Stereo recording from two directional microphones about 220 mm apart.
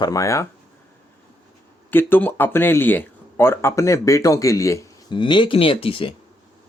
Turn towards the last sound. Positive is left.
turn(degrees=25)  # may be behind; listen again after turning